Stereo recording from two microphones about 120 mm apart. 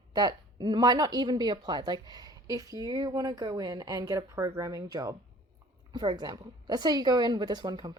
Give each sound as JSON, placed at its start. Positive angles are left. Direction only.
{"t": 0.1, "sound": "speech", "side_deg": -35}